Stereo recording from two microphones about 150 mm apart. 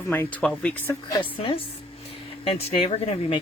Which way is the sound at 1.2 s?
40° left (ahead or behind).